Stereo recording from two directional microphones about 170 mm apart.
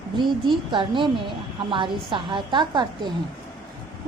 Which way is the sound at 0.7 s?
30° right (ahead or behind).